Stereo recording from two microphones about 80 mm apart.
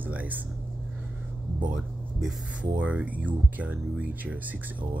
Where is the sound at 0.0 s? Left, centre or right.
Right.